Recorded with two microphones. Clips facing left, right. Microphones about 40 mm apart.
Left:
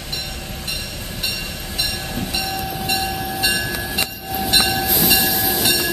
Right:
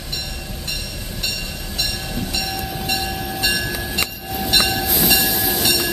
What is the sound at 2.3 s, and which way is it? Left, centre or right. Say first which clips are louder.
Train: left 2 dB; centre.